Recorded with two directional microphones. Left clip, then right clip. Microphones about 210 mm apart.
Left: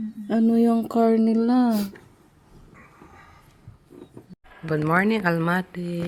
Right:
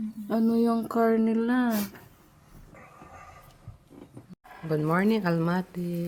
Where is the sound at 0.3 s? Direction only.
20° left (ahead or behind).